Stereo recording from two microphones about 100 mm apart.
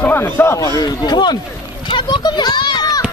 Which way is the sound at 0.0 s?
20° left (ahead or behind).